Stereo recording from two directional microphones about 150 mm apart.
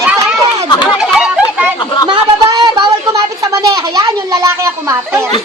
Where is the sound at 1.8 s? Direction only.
30° left (ahead or behind).